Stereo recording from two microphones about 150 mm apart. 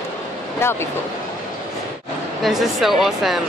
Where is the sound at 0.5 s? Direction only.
15° left (ahead or behind).